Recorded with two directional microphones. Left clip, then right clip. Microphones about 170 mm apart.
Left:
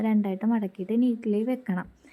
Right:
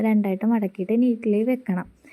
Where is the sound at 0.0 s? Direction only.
20° right (ahead or behind).